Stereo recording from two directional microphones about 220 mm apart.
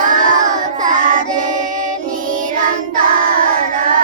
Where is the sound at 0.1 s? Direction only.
35° right (ahead or behind).